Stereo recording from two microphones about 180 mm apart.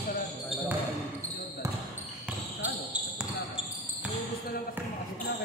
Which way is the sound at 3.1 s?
5° right (ahead or behind).